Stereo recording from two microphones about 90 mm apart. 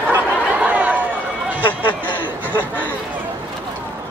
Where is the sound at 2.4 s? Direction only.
20° right (ahead or behind).